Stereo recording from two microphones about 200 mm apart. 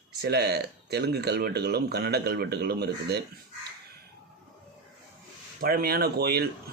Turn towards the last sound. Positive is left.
turn(degrees=-50)  # may be behind; listen again after turning